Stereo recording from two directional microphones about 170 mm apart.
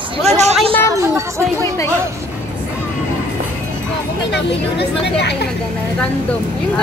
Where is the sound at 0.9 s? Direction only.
20° right (ahead or behind).